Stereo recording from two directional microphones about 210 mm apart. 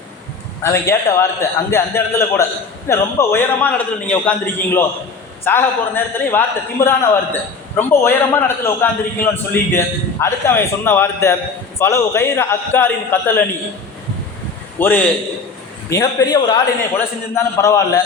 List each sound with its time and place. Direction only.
0.6 s a man's voice: 15° left (ahead or behind)
14.8 s a man's voice: 10° left (ahead or behind)